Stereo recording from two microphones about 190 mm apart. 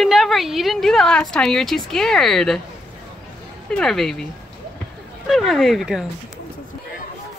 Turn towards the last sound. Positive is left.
turn(degrees=0)  # may be behind; listen again after turning